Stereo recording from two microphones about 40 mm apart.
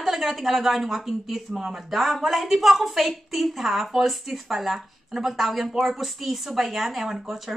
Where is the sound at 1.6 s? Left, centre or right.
Centre.